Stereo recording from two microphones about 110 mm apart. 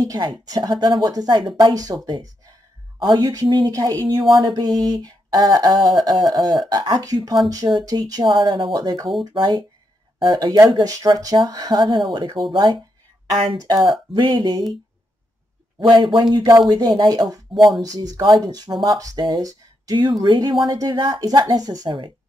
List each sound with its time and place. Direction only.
0.0 s speech: 35° right (ahead or behind)
15.9 s speech: 45° right (ahead or behind)